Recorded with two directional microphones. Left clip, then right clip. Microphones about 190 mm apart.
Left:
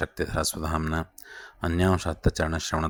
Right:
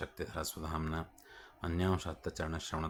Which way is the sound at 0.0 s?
35° left (ahead or behind).